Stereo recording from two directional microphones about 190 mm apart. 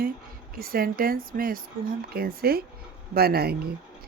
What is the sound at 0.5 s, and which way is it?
Speech, 50° right (ahead or behind).